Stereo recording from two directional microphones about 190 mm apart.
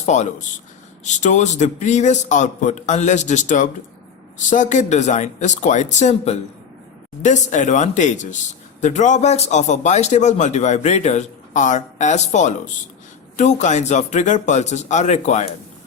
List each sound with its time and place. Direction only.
0.0 s a man's voice: 35° left (ahead or behind)